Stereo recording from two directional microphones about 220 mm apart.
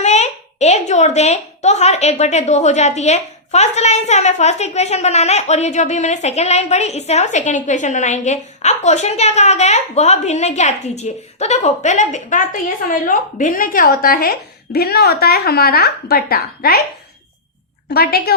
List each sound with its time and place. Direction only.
0.0 s a woman's voice: 30° left (ahead or behind)
17.8 s a woman's voice: 45° left (ahead or behind)